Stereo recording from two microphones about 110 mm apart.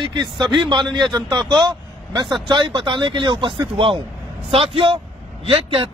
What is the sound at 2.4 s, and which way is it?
A man's voice, 45° right (ahead or behind).